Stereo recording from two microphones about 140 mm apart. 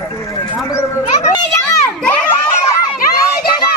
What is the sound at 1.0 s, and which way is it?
Children playing, 50° left (ahead or behind).